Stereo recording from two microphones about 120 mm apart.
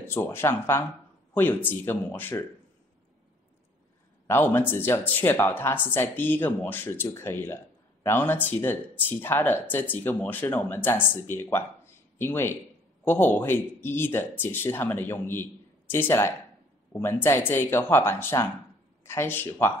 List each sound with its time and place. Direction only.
0.1 s speech: 20° left (ahead or behind)
4.3 s speech: 20° left (ahead or behind)